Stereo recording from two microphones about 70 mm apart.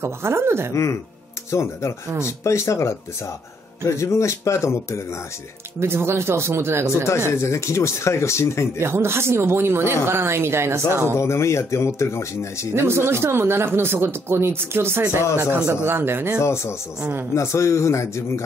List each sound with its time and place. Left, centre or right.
0.0 s speech: right
1.5 s speech: left
5.8 s speech: right
7.1 s speech: left
8.7 s speech: right
11.1 s speech: left
12.7 s speech: right
16.3 s speech: left